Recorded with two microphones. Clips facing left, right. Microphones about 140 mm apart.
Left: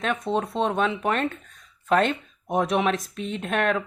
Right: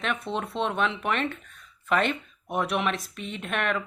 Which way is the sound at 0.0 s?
40° left (ahead or behind).